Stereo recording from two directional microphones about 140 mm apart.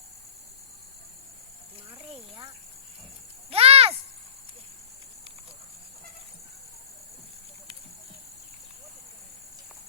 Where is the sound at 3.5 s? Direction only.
45° right (ahead or behind).